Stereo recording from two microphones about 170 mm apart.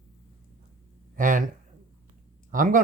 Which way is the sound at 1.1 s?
50° right (ahead or behind).